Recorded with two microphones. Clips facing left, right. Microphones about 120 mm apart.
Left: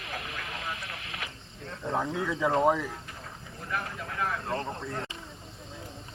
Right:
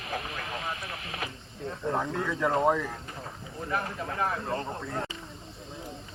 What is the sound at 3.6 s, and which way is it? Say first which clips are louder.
Speech: right 3 dB; 35° right (ahead or behind).